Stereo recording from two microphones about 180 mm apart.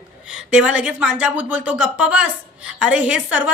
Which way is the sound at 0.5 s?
5° right (ahead or behind).